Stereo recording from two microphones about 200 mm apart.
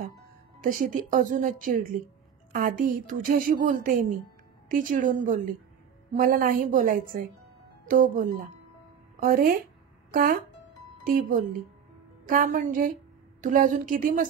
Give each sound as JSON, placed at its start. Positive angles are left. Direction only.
{"t": 0.6, "sound": "a woman's voice", "side_deg": -45}
{"t": 6.1, "sound": "a woman's voice", "side_deg": -45}